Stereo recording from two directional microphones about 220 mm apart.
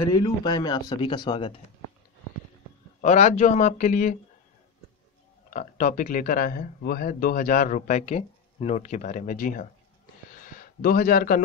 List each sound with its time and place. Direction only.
0.2 s speech: 20° left (ahead or behind)
3.0 s speech: 30° left (ahead or behind)
5.5 s speech: 35° left (ahead or behind)